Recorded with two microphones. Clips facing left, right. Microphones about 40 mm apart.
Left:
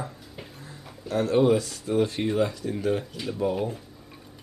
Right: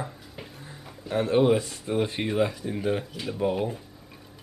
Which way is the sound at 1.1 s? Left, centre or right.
Right.